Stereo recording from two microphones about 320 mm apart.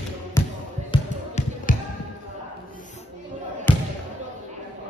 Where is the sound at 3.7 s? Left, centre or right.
Centre.